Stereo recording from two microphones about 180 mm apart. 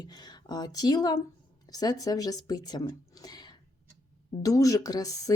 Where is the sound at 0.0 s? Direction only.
25° left (ahead or behind).